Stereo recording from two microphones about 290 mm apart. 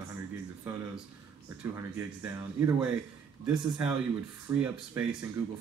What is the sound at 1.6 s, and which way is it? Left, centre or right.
Speech, centre.